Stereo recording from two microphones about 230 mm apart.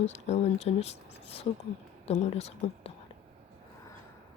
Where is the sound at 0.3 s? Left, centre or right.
Left.